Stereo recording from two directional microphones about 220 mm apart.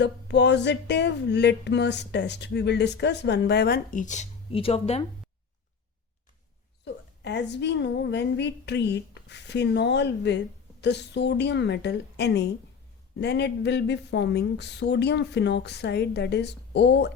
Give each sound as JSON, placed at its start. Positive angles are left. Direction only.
{"t": 0.0, "sound": "speech", "side_deg": 50}
{"t": 7.3, "sound": "speech", "side_deg": 50}